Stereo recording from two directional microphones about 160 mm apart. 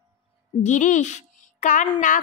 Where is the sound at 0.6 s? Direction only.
50° left (ahead or behind).